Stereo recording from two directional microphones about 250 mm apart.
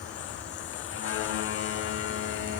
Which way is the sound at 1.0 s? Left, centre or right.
Left.